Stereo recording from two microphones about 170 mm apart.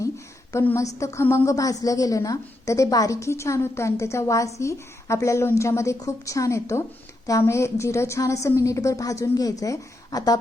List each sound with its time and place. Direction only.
0.5 s a woman's voice: 15° left (ahead or behind)